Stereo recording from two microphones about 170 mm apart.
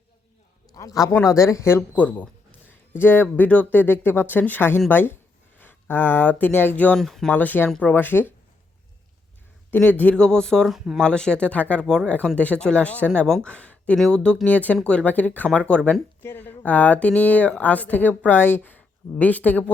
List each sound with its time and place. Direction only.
0.7 s speech: 20° left (ahead or behind)
10.0 s speech: 5° left (ahead or behind)